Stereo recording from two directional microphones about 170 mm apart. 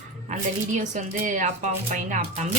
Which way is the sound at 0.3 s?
45° right (ahead or behind).